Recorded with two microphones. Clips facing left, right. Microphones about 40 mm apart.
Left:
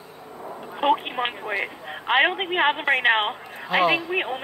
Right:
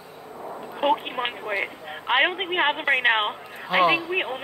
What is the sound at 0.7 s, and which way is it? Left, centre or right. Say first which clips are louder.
Speech: left 1 dB; centre.